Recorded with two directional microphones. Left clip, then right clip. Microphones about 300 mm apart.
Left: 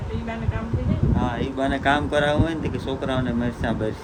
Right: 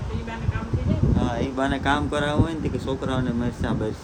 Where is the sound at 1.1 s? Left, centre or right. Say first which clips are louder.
Left 1 dB; centre.